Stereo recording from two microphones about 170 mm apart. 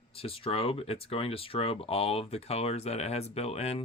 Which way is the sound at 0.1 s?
35° left (ahead or behind).